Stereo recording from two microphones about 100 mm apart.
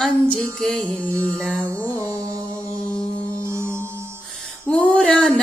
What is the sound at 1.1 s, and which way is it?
Music, 25° right (ahead or behind).